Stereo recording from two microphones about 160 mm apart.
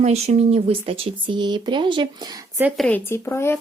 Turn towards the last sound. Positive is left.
turn(degrees=15)  # may be behind; listen again after turning